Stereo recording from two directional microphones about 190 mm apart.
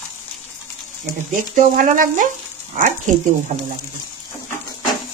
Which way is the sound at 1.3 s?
45° right (ahead or behind).